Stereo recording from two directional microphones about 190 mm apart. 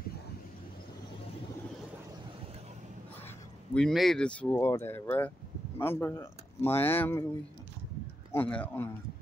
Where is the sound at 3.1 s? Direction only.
10° left (ahead or behind).